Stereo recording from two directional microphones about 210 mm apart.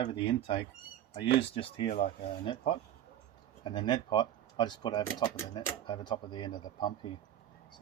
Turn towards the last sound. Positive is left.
turn(degrees=20)  # may be behind; listen again after turning